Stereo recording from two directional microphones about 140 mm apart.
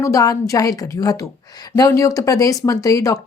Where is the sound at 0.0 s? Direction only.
25° left (ahead or behind).